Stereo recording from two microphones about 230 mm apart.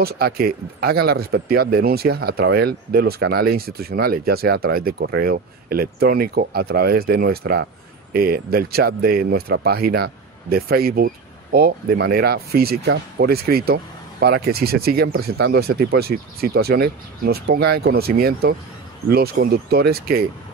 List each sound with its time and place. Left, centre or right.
0.0 s speech: right